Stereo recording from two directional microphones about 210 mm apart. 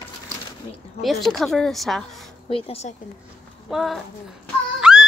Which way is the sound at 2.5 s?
25° left (ahead or behind).